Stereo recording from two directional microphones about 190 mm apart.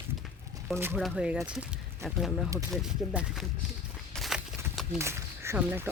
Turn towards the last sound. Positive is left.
turn(degrees=-10)  # may be behind; listen again after turning